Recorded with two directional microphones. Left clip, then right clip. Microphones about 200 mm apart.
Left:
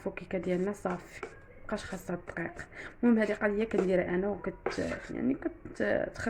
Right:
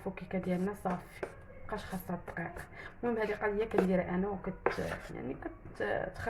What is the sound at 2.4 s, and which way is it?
Speech, 45° left (ahead or behind).